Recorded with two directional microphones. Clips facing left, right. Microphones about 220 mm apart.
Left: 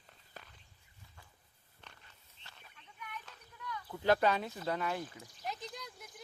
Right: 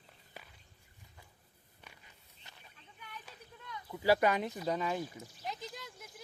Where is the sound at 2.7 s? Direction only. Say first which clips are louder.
Left 4 dB; 30° right (ahead or behind).